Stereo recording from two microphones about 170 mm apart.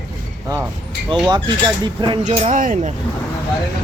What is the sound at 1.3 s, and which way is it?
Speech, 30° right (ahead or behind).